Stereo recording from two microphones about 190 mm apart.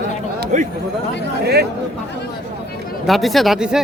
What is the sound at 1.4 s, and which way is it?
Speech, 55° right (ahead or behind).